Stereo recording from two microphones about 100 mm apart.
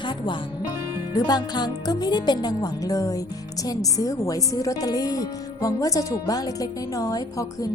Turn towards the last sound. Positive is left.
turn(degrees=35)  # may be behind; listen again after turning